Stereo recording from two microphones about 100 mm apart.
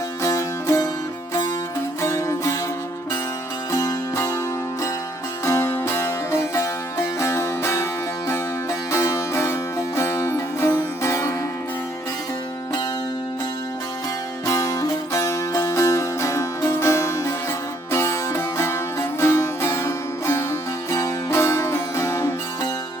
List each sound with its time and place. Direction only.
0.2 s music: 30° left (ahead or behind)
2.0 s music: 30° left (ahead or behind)
3.7 s music: 30° left (ahead or behind)
5.5 s music: 25° left (ahead or behind)
8.9 s music: 30° left (ahead or behind)
14.4 s music: 35° left (ahead or behind)